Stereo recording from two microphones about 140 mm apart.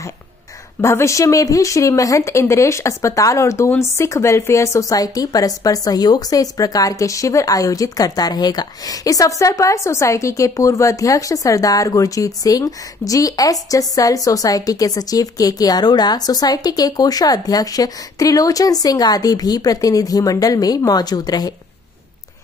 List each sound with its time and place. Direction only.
0.7 s speech: 20° left (ahead or behind)